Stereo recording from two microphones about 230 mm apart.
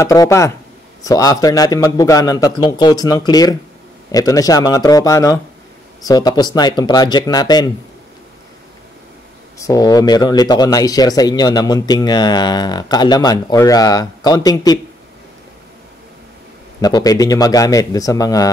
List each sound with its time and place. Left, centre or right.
0.0 s speech: centre
9.6 s speech: centre
16.8 s speech: centre